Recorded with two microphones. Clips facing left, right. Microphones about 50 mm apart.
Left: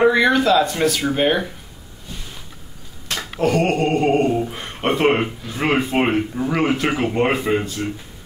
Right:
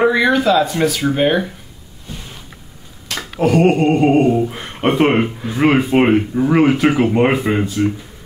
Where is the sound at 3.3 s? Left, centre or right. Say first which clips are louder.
Right 5 dB; centre.